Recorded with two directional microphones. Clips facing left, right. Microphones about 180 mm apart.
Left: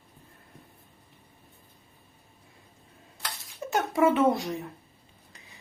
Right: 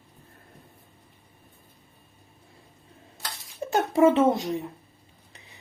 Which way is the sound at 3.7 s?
30° right (ahead or behind).